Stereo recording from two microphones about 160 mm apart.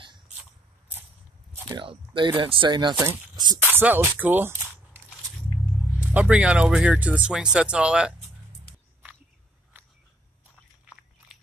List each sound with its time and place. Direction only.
1.8 s speech: 30° right (ahead or behind)
3.7 s speech: 10° right (ahead or behind)